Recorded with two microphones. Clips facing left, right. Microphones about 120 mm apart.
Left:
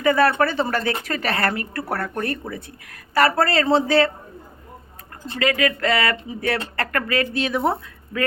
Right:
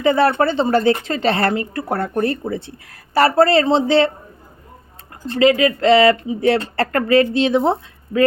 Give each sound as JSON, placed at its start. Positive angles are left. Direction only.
{"t": 0.0, "sound": "a woman's voice", "side_deg": -25}
{"t": 5.4, "sound": "a woman's voice", "side_deg": -25}